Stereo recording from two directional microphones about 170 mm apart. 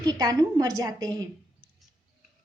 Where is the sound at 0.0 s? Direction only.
20° right (ahead or behind).